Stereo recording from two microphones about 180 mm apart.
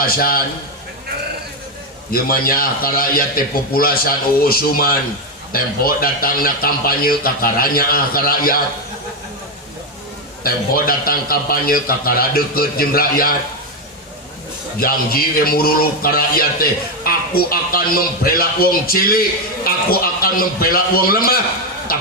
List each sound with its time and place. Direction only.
0.0 s speech: 55° left (ahead or behind)
2.0 s speech: 55° left (ahead or behind)
10.4 s speech: 55° left (ahead or behind)
14.8 s speech: 55° left (ahead or behind)